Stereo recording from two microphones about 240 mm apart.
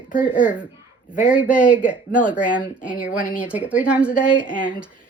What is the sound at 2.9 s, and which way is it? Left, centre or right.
Speech, left.